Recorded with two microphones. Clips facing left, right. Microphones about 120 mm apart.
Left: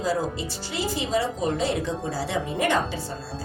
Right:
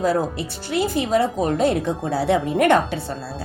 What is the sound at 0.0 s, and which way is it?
A woman's voice, 60° right (ahead or behind).